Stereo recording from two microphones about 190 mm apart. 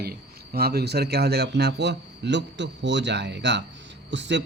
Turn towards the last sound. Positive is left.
turn(degrees=-70)  # may be behind; listen again after turning